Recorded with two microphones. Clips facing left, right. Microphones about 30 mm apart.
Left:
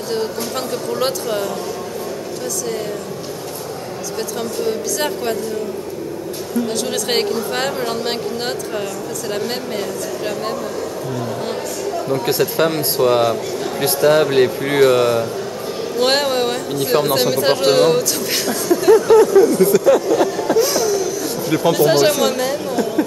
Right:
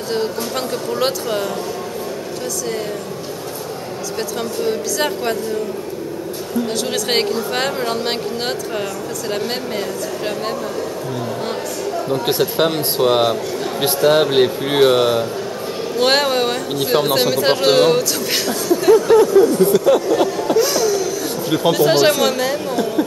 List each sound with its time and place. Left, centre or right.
0.1 s speech: centre
4.6 s speech: centre
6.7 s speech: centre
12.4 s speech: right
16.0 s speech: centre
19.3 s speech: right; by 22.8 s centre